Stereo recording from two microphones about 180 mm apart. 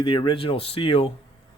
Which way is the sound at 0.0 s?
25° left (ahead or behind).